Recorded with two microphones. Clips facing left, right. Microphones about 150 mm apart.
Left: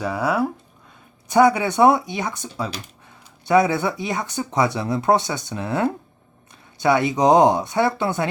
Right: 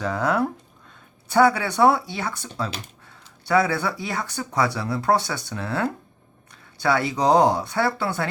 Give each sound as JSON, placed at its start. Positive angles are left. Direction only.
{"t": 0.0, "sound": "speech", "side_deg": 10}